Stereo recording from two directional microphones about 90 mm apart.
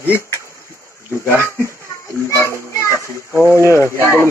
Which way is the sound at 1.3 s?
25° left (ahead or behind).